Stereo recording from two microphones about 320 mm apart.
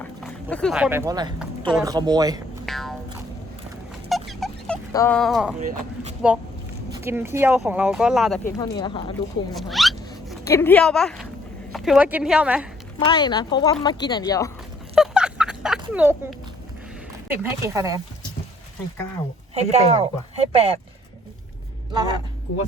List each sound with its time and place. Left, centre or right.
0.0 s speech: centre
2.6 s music: centre
4.1 s a sound: centre
5.5 s speech: right
6.9 s speech: centre
8.5 s speech: centre
9.6 s a sound: centre
11.7 s a woman's voice: centre
13.1 s speech: centre
14.9 s a sound: centre
15.9 s speech: centre
17.2 s speech: centre
19.5 s speech: centre